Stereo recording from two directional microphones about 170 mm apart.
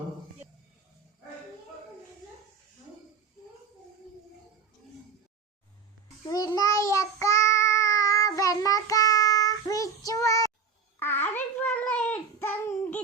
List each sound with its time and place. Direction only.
6.2 s child singing: 20° left (ahead or behind)